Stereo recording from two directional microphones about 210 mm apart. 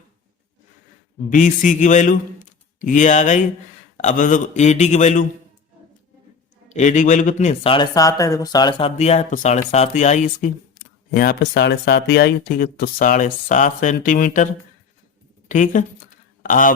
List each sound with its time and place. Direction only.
1.3 s speech: 35° left (ahead or behind)
6.7 s speech: 35° left (ahead or behind); by 8.9 s 20° left (ahead or behind)
9.0 s speech: 30° left (ahead or behind)
11.1 s speech: 45° left (ahead or behind)
15.4 s speech: 35° left (ahead or behind)